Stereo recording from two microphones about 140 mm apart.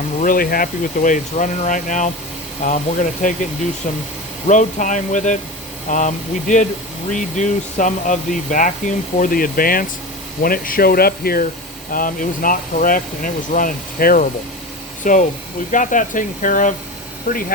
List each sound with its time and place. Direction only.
0.2 s speech: 85° left; by 3.3 s 60° left (ahead or behind)
4.4 s speech: 60° left (ahead or behind); by 11.4 s 90° left
11.9 s speech: 80° left
15.0 s speech: 65° left (ahead or behind)